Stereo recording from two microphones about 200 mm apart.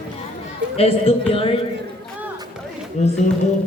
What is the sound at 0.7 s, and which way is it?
Speech, 30° left (ahead or behind).